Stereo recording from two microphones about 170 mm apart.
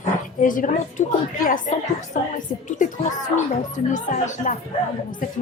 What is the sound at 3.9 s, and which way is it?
Speech, 45° left (ahead or behind).